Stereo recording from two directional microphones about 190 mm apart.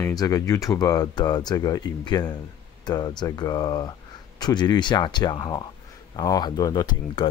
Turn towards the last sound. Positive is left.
turn(degrees=25)  # may be behind; listen again after turning